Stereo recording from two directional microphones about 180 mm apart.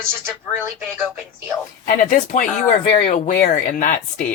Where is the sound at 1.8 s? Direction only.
45° left (ahead or behind).